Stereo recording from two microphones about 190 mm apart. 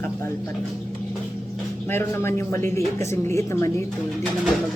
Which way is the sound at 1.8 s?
10° left (ahead or behind).